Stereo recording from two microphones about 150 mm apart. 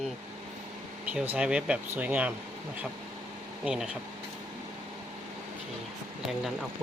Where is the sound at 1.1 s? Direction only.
10° right (ahead or behind).